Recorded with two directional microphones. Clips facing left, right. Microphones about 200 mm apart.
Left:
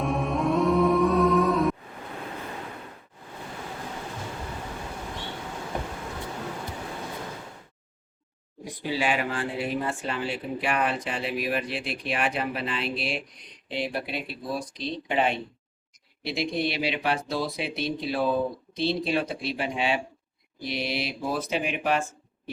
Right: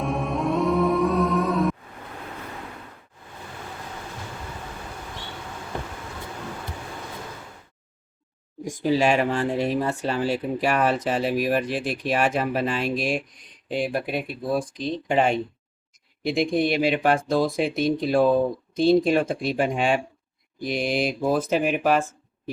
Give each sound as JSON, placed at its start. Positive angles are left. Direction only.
{"t": 0.0, "sound": "music", "side_deg": 0}
{"t": 8.6, "sound": "speech", "side_deg": -45}